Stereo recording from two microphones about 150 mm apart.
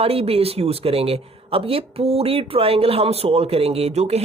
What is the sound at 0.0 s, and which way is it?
Speech, 40° right (ahead or behind).